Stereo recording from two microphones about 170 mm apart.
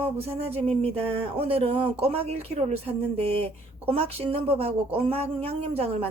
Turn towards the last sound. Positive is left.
turn(degrees=-35)  # may be behind; listen again after turning